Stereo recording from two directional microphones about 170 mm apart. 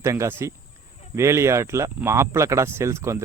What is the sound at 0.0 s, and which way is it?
Speech, 15° right (ahead or behind).